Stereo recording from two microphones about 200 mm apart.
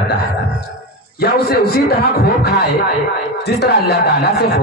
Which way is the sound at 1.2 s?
50° left (ahead or behind).